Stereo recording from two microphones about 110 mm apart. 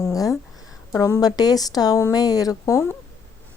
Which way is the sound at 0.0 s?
30° left (ahead or behind).